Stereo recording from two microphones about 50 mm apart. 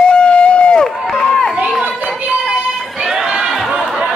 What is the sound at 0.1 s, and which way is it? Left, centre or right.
Run, left.